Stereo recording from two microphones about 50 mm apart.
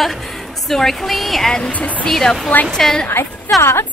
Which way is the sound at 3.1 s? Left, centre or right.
Left.